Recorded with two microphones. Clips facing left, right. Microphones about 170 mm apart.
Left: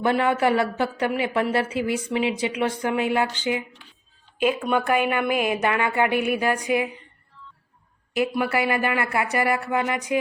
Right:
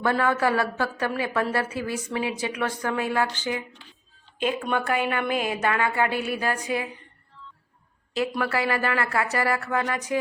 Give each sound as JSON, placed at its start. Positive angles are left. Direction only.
{"t": 0.0, "sound": "a woman's voice", "side_deg": 20}
{"t": 8.1, "sound": "a woman's voice", "side_deg": 15}